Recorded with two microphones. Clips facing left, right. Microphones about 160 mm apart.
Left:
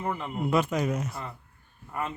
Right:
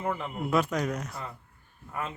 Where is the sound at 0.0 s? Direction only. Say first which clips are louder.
Left 1 dB; centre (ahead or behind).